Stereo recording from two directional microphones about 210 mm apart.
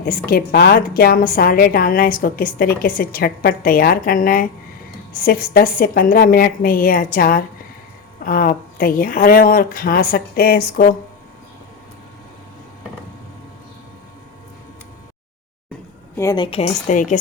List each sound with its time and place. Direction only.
0.0 s a woman's voice: 45° left (ahead or behind)
16.1 s a woman's voice: 15° left (ahead or behind); by 17.2 s 35° left (ahead or behind)